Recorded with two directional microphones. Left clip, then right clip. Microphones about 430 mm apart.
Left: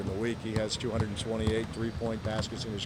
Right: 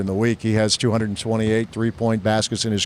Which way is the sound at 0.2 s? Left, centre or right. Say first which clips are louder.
Right 13 dB; right.